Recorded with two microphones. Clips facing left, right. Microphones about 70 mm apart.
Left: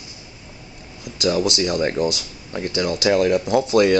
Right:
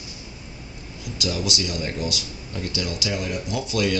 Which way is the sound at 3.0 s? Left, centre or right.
Left.